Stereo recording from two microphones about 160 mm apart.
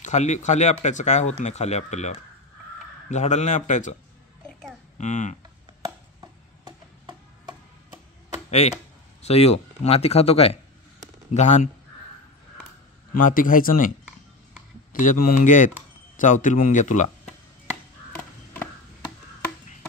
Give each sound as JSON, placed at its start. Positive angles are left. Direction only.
{"t": 0.0, "sound": "speech", "side_deg": 45}
{"t": 4.9, "sound": "speech", "side_deg": 50}
{"t": 6.6, "sound": "a sound", "side_deg": -25}
{"t": 8.5, "sound": "speech", "side_deg": 45}
{"t": 13.1, "sound": "speech", "side_deg": 60}
{"t": 18.1, "sound": "a sound", "side_deg": 10}